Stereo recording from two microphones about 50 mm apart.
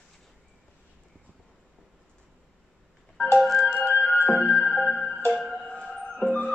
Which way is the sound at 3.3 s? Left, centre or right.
Centre.